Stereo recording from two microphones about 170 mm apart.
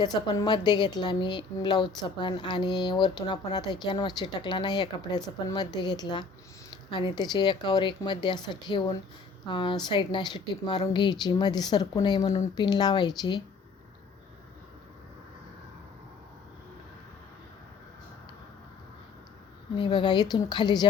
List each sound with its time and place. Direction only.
0.0 s a woman's voice: 25° left (ahead or behind)
19.7 s a woman's voice: 30° left (ahead or behind)